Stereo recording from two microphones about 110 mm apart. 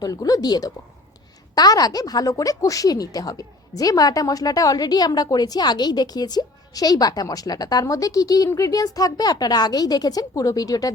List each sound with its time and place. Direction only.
0.0 s a woman's voice: 35° left (ahead or behind)